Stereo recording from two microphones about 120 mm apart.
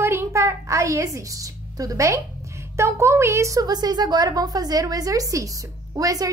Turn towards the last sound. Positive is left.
turn(degrees=-30)  # may be behind; listen again after turning